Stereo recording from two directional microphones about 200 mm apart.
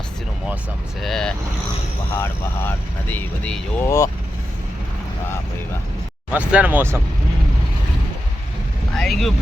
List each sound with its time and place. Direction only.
1.0 s speech: 5° left (ahead or behind)
6.3 s speech: 5° right (ahead or behind)
9.0 s speech: centre (ahead or behind)